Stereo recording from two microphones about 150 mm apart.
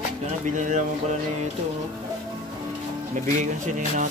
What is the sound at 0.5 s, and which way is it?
Speech, 55° right (ahead or behind).